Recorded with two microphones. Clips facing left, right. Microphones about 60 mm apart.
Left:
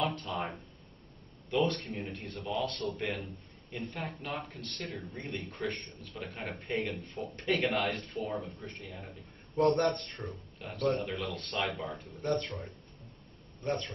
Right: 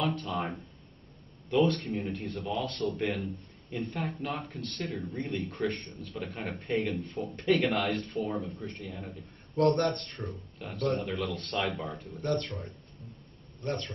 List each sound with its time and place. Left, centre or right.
0.0 s speech: centre